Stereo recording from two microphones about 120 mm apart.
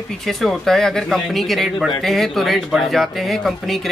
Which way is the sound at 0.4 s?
Centre (ahead or behind).